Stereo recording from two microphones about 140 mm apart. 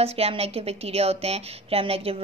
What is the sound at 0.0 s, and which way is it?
A woman's voice, 45° right (ahead or behind).